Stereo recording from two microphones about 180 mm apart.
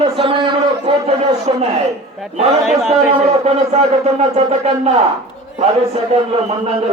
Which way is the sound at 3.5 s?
35° right (ahead or behind).